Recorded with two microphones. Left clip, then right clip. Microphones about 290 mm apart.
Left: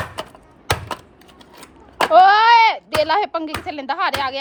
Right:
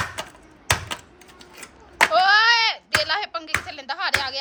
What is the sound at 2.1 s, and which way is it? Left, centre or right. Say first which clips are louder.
Speech: left 8 dB; left.